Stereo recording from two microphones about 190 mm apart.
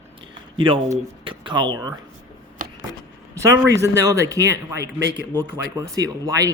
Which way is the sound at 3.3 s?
15° right (ahead or behind).